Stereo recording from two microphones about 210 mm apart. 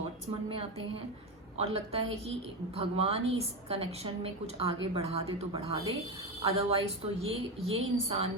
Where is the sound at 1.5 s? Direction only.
30° right (ahead or behind).